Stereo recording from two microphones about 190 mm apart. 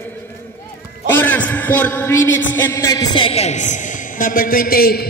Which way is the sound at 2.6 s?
15° left (ahead or behind).